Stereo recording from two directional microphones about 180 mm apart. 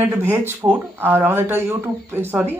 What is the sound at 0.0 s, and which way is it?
Speech, 10° right (ahead or behind).